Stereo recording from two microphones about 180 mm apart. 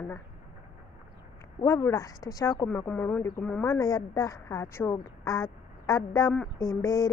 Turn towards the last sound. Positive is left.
turn(degrees=15)  # may be behind; listen again after turning